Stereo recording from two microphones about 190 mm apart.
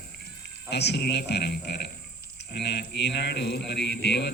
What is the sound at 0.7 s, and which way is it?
A man's voice, 60° left (ahead or behind).